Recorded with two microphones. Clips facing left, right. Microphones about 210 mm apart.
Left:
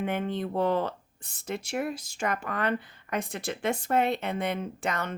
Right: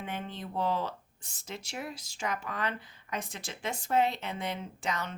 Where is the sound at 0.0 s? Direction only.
55° left (ahead or behind).